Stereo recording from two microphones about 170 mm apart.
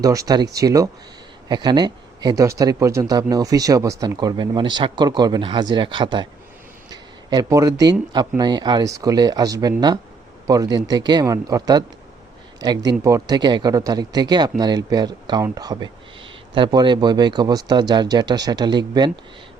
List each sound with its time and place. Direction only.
0.0 s speech: 20° right (ahead or behind)